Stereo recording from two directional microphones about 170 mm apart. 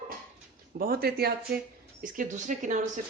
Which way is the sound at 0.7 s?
60° right (ahead or behind).